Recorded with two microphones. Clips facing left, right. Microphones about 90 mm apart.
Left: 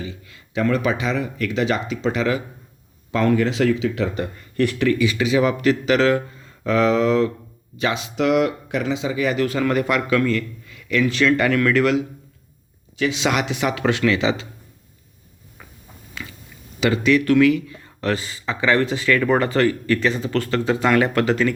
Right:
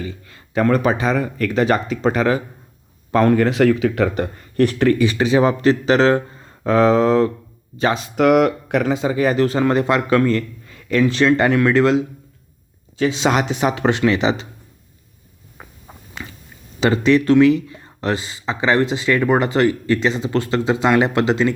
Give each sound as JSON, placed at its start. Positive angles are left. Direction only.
{"t": 0.0, "sound": "a man's voice", "side_deg": -45}
{"t": 15.6, "sound": "a sound", "side_deg": -35}
{"t": 16.8, "sound": "a man's voice", "side_deg": -30}